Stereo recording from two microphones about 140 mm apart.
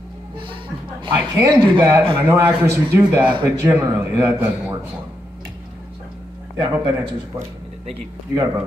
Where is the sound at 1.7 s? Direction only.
25° right (ahead or behind).